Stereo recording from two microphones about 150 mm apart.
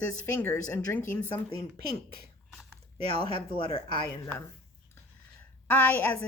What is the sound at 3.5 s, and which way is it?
Speech, 35° left (ahead or behind).